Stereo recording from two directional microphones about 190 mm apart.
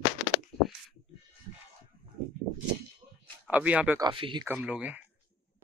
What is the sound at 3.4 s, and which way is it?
Speech, 10° right (ahead or behind).